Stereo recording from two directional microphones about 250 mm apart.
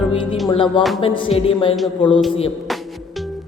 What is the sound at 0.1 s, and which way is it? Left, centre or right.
Music, left.